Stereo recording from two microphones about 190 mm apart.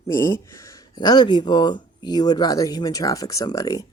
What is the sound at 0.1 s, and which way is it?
Speech, 15° left (ahead or behind).